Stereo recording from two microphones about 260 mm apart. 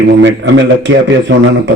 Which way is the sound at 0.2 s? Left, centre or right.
Right.